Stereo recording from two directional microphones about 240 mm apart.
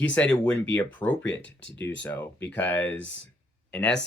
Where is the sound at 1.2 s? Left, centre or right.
Left.